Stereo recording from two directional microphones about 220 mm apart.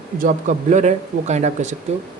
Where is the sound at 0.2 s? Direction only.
35° right (ahead or behind).